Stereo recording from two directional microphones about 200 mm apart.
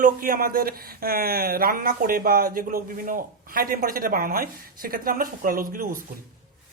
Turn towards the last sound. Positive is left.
turn(degrees=-45)  # may be behind; listen again after turning